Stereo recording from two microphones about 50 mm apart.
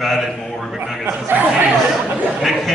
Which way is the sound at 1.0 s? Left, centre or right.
Right.